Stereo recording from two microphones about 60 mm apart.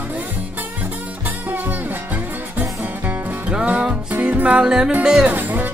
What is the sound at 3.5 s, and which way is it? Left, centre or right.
Music, centre.